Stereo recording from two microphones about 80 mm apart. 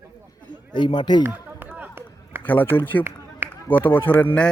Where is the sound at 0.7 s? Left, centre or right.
Left.